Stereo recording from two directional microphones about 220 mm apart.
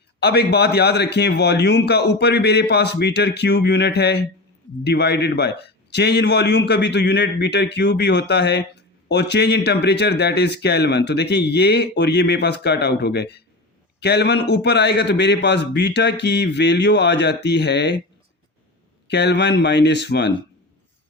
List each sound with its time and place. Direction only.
0.2 s a man's voice: 50° left (ahead or behind)
19.0 s a man's voice: 50° left (ahead or behind)